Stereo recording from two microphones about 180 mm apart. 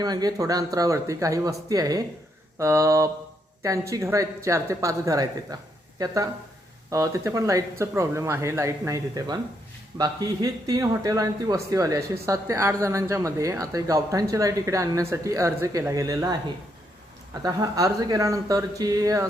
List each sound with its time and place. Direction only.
0.0 s a woman's voice: 20° right (ahead or behind)
17.4 s speech: 20° right (ahead or behind)